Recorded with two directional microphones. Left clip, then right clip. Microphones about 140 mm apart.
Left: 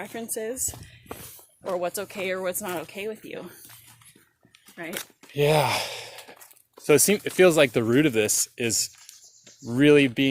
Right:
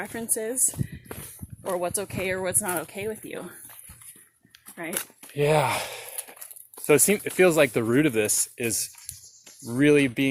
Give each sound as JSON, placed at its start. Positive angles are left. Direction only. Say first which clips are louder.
{"t": 0.0, "sound": "speech", "louder": "right 1 dB", "side_deg": -40}
{"t": 1.6, "sound": "speech", "louder": "even", "side_deg": -25}
{"t": 4.7, "sound": "speech", "louder": "right 1 dB", "side_deg": -15}
{"t": 5.3, "sound": "speech", "louder": "left 1 dB", "side_deg": 35}
{"t": 8.5, "sound": "speech", "louder": "left 3 dB", "side_deg": 40}